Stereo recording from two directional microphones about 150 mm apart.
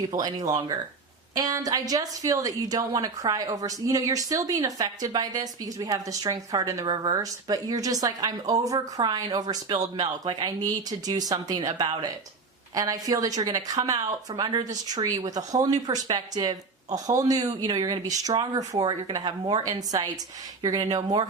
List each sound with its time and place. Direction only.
0.1 s a woman's voice: 25° right (ahead or behind)